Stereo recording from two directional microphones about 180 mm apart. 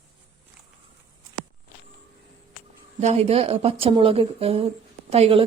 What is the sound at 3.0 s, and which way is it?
A woman's voice, 35° right (ahead or behind).